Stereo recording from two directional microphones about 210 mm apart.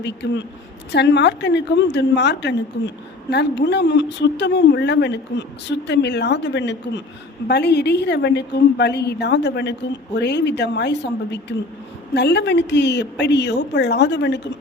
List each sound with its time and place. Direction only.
0.0 s a woman's voice: 55° left (ahead or behind)